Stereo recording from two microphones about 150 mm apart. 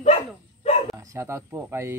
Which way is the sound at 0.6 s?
45° left (ahead or behind).